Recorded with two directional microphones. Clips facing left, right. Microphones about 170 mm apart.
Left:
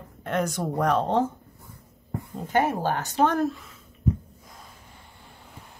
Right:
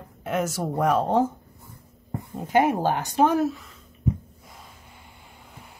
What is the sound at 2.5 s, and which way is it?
Speech, 10° right (ahead or behind).